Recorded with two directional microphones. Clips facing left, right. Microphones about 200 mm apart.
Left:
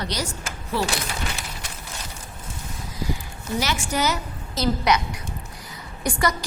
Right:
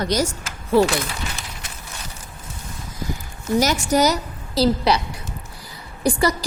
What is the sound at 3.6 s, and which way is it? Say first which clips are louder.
A woman's voice: right 6 dB; 40° right (ahead or behind).